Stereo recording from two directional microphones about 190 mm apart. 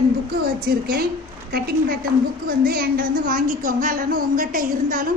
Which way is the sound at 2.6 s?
50° right (ahead or behind).